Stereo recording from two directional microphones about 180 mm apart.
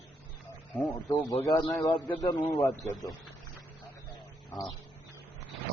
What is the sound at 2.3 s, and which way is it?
Speech, 10° left (ahead or behind).